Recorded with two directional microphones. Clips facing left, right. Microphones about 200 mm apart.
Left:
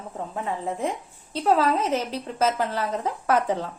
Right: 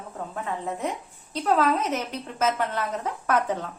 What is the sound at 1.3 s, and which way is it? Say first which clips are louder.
A woman's voice: left 1 dB; 30° left (ahead or behind).